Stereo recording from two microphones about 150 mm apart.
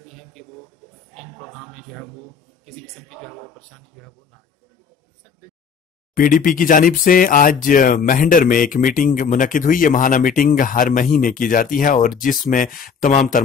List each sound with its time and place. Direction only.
0.0 s a sound: centre (ahead or behind)
2.6 s a man's voice: centre (ahead or behind)
6.1 s speech: 65° left (ahead or behind)